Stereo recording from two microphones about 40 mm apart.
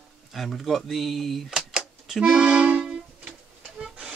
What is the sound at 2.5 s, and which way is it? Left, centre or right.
Accordion, right.